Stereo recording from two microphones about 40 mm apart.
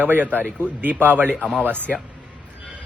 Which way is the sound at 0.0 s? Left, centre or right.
Right.